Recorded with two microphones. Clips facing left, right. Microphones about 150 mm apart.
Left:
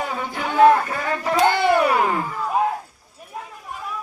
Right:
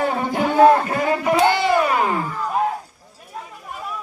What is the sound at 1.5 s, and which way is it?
Music, 55° left (ahead or behind).